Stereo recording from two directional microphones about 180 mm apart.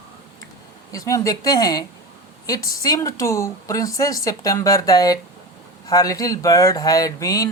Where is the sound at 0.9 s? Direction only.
20° left (ahead or behind).